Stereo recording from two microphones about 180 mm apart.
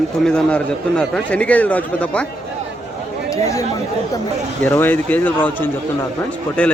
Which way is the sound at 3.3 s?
20° left (ahead or behind).